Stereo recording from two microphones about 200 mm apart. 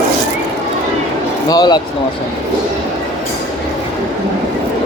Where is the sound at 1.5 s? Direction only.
20° left (ahead or behind).